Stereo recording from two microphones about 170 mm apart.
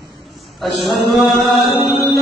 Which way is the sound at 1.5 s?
30° left (ahead or behind).